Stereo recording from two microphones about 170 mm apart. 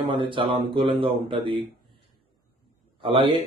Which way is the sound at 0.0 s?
30° right (ahead or behind).